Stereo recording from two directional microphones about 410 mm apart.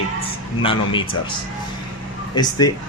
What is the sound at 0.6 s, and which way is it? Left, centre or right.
Speech, centre.